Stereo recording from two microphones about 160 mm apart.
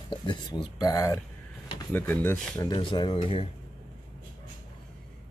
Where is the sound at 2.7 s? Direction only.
30° left (ahead or behind).